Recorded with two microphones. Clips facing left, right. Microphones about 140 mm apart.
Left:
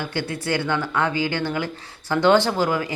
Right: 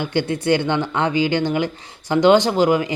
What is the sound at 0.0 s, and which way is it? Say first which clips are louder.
Speech: right 6 dB; 20° right (ahead or behind).